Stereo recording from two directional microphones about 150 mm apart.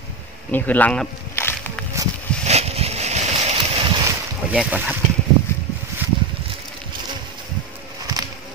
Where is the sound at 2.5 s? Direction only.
45° right (ahead or behind).